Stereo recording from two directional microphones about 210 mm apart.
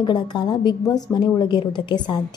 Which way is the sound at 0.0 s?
20° left (ahead or behind).